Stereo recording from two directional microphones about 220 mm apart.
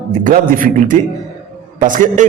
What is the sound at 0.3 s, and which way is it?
A man's voice, 35° right (ahead or behind).